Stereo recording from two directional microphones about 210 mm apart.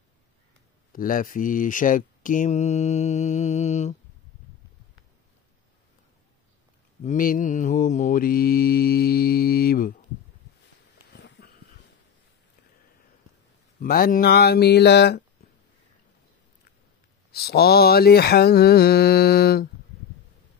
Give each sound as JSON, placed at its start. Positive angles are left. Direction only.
{"t": 0.9, "sound": "speech", "side_deg": 40}
{"t": 7.0, "sound": "mantra", "side_deg": 40}
{"t": 11.1, "sound": "a sound", "side_deg": 55}
{"t": 13.7, "sound": "mantra", "side_deg": 45}
{"t": 17.3, "sound": "mantra", "side_deg": 50}